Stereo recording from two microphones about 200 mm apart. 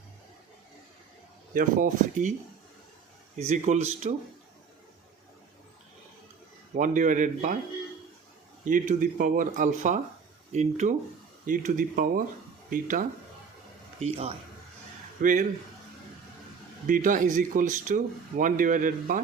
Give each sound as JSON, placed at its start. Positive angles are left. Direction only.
{"t": 1.5, "sound": "speech", "side_deg": -40}
{"t": 3.3, "sound": "speech", "side_deg": -35}
{"t": 6.7, "sound": "speech", "side_deg": -40}
{"t": 8.6, "sound": "speech", "side_deg": -40}
{"t": 14.0, "sound": "a man's voice", "side_deg": -30}
{"t": 15.2, "sound": "speech", "side_deg": -40}
{"t": 16.8, "sound": "speech", "side_deg": -40}